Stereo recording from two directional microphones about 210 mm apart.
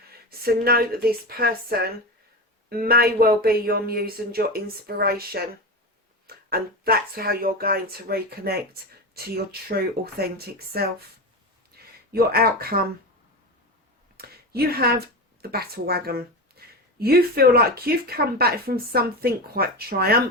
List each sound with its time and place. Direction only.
0.3 s speech: 45° right (ahead or behind)
11.7 s a sound: 50° right (ahead or behind)
12.1 s speech: 45° right (ahead or behind)
14.2 s speech: 45° right (ahead or behind)